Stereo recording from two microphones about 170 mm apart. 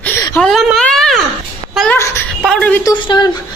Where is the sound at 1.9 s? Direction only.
15° left (ahead or behind).